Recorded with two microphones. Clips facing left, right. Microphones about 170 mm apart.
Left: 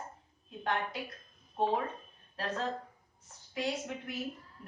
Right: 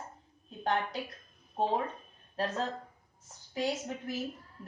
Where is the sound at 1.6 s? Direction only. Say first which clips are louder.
Even; 40° right (ahead or behind).